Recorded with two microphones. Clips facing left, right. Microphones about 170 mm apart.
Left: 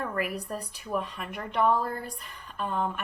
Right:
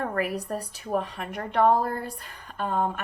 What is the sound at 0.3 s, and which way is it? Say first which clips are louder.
A woman's voice: right 4 dB; 40° right (ahead or behind).